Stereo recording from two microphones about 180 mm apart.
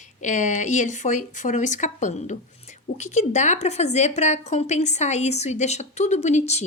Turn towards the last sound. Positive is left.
turn(degrees=40)  # may be behind; listen again after turning